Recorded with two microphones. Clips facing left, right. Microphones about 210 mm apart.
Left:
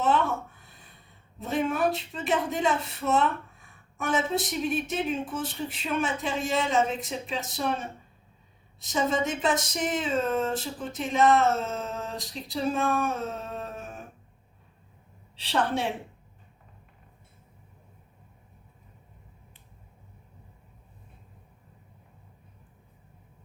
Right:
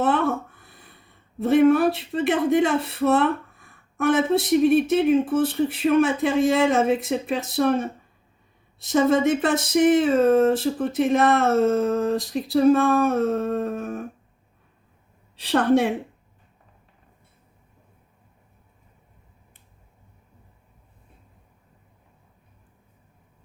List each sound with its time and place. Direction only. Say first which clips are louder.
0.0 s a sound: right 4 dB; 55° right (ahead or behind)
1.5 s speech: right 10 dB; 60° right (ahead or behind)
4.6 s speech: right 11 dB; 60° right (ahead or behind)
8.9 s speech: right 9 dB; 60° right (ahead or behind)
15.4 s speech: right 9 dB; 55° right (ahead or behind)